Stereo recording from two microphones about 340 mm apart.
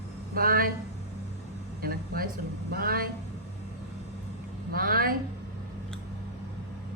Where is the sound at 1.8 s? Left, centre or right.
Right.